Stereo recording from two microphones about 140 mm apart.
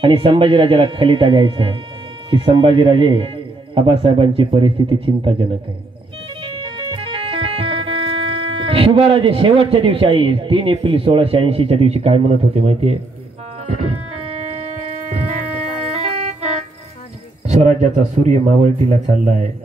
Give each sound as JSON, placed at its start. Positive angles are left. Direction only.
{"t": 0.0, "sound": "speech", "side_deg": -40}
{"t": 7.0, "sound": "music", "side_deg": -40}
{"t": 15.9, "sound": "music", "side_deg": -50}
{"t": 17.5, "sound": "speech", "side_deg": -60}